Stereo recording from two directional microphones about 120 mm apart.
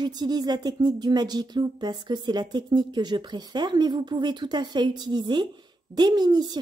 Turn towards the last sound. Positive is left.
turn(degrees=-35)  # may be behind; listen again after turning